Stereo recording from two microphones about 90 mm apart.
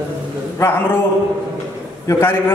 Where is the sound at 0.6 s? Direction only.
25° left (ahead or behind).